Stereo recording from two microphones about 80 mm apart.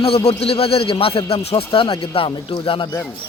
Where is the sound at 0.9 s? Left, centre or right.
Left.